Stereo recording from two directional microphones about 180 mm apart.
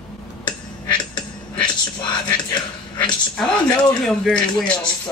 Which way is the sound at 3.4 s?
Centre (ahead or behind).